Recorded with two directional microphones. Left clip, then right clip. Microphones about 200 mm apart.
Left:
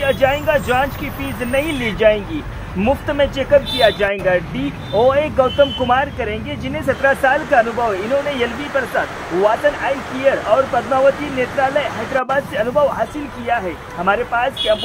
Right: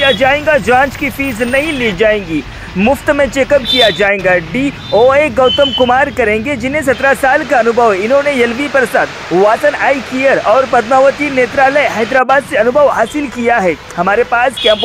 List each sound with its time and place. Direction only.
0.0 s speech: 15° right (ahead or behind)
14.1 s speech: 15° right (ahead or behind)